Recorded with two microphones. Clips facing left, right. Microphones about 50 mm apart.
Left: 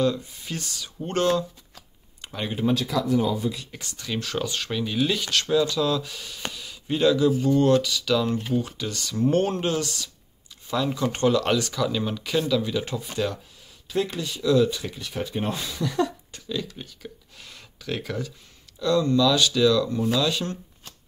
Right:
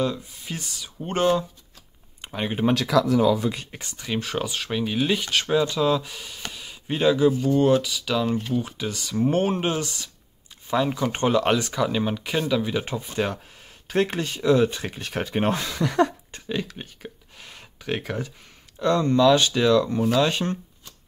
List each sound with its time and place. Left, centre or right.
0.0 s speech: centre
2.2 s a sound: right
2.7 s speech: right
3.7 s speech: right
13.8 s speech: right
16.3 s a sound: right
16.7 s speech: right